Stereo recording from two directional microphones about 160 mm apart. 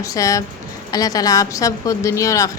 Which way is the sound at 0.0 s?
20° left (ahead or behind).